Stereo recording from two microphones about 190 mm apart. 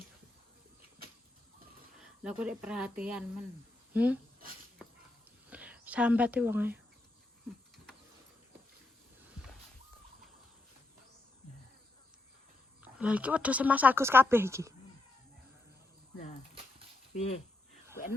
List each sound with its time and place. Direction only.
2.4 s speech: 5° right (ahead or behind)
5.5 s speech: 5° right (ahead or behind)
12.8 s speech: 5° right (ahead or behind)
17.2 s speech: 35° left (ahead or behind)